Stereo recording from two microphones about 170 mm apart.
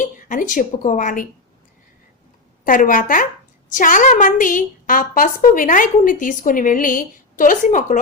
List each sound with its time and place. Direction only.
0.0 s a woman's voice: 50° left (ahead or behind)
2.6 s a woman's voice: 55° left (ahead or behind)